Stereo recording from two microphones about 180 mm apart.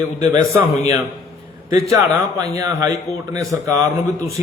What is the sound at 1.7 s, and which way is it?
A man's voice, 20° right (ahead or behind).